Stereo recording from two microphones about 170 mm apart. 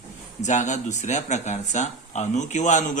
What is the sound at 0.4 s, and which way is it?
A man's voice, 45° left (ahead or behind).